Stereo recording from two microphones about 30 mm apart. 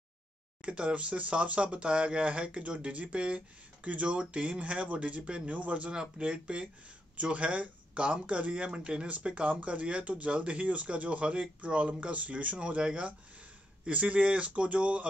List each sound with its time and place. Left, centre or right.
0.6 s speech: right
5.9 s speech: right
7.2 s speech: right
9.3 s speech: right